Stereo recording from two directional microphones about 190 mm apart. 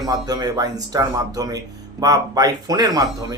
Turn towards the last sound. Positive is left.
turn(degrees=-20)  # may be behind; listen again after turning